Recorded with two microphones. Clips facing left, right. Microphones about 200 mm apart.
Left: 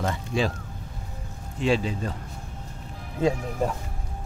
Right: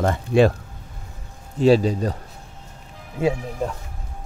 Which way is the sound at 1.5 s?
40° right (ahead or behind).